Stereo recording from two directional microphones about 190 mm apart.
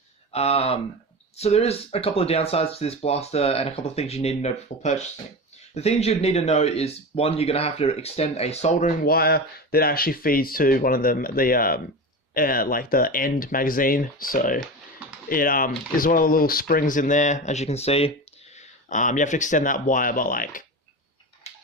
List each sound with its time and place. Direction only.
0.3 s speech: 30° left (ahead or behind)
9.0 s speech: 55° left (ahead or behind)